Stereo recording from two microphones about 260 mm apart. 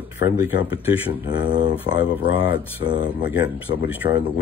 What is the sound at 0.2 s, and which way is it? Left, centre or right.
Speech, centre.